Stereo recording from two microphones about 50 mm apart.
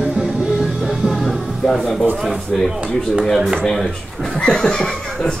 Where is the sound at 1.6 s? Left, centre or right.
Centre.